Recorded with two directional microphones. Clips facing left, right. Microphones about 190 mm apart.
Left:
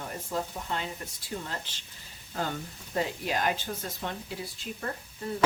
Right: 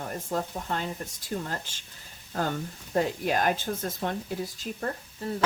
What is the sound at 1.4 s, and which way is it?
Speech, 45° right (ahead or behind).